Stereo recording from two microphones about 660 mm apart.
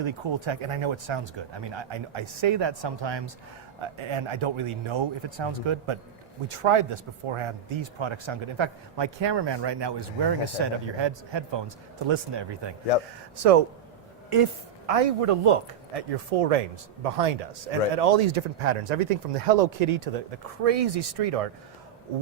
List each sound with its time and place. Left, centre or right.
0.0 s speech: right
13.3 s speech: right
14.8 s a man's voice: right